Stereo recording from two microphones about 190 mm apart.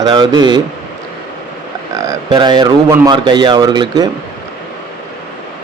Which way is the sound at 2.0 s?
20° right (ahead or behind).